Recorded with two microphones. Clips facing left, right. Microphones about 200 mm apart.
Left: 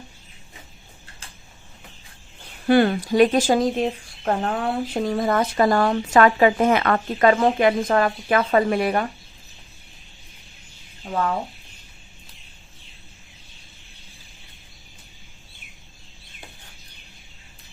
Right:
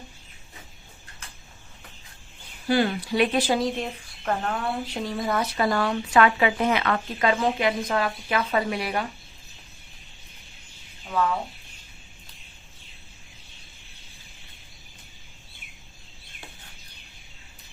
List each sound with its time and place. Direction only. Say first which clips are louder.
2.6 s speech: left 6 dB; 55° left (ahead or behind); by 4.5 s 35° left (ahead or behind)
4.5 s speech: left 5 dB; 55° left (ahead or behind)